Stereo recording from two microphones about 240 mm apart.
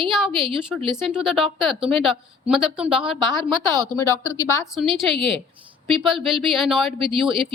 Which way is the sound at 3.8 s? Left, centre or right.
Centre.